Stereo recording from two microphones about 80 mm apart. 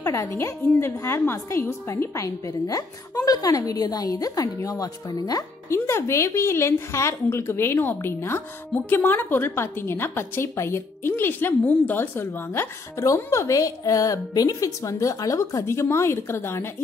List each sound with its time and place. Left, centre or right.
0.0 s a woman's voice: left
5.7 s a woman's voice: left
12.9 s a woman's voice: left